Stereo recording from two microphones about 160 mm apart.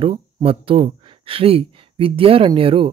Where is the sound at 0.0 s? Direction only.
35° right (ahead or behind).